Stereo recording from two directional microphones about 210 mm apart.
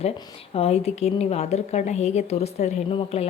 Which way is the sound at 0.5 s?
30° left (ahead or behind).